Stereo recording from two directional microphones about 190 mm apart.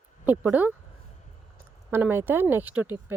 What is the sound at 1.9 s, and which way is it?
Speech, 10° right (ahead or behind).